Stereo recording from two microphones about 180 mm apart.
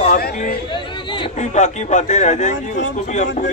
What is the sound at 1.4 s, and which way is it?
A man's voice, 40° left (ahead or behind).